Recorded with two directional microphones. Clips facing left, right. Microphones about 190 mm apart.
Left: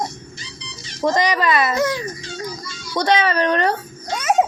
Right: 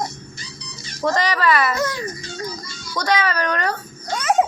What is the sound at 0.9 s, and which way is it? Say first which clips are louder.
A child's voice: left 2 dB; 20° left (ahead or behind).